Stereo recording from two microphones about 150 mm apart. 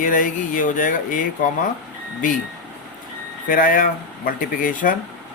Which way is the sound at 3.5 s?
65° left (ahead or behind).